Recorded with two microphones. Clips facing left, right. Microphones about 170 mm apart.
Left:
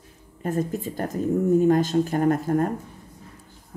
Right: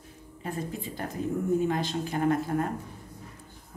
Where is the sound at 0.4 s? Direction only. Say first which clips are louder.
Left 8 dB; 45° left (ahead or behind).